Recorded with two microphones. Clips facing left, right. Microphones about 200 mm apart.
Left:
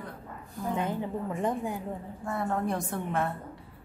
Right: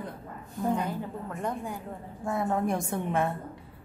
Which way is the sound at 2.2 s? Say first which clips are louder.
Right 3 dB; 15° right (ahead or behind).